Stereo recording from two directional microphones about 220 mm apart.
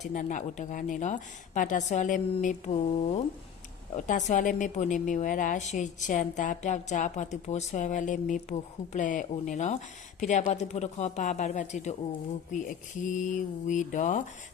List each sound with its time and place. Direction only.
0.0 s a woman's voice: 35° left (ahead or behind)